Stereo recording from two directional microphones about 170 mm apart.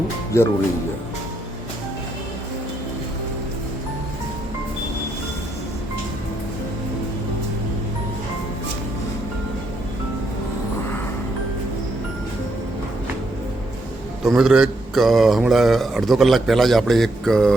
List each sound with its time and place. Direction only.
0.3 s speech: 15° left (ahead or behind)
14.3 s speech: 5° right (ahead or behind)